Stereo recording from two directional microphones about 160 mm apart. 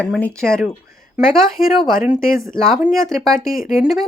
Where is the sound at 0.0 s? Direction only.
10° left (ahead or behind).